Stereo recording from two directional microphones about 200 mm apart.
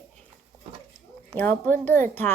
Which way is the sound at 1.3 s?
10° left (ahead or behind).